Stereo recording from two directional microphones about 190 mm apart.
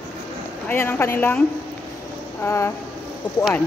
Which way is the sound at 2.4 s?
15° left (ahead or behind).